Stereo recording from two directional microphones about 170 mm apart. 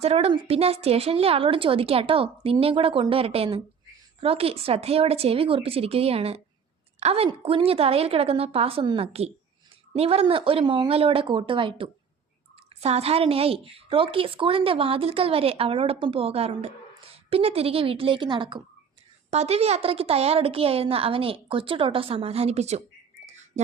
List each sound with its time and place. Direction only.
0.0 s a woman's voice: 35° right (ahead or behind)
19.3 s a woman's voice: 40° right (ahead or behind)
23.2 s a sound: 40° right (ahead or behind)